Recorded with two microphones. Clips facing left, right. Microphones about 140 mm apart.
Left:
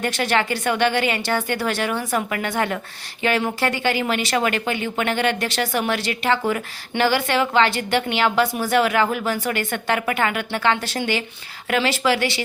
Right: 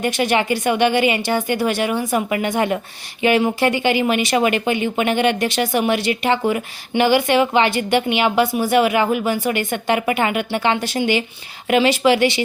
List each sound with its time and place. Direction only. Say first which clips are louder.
0.0 s speech: right 3 dB; 15° right (ahead or behind)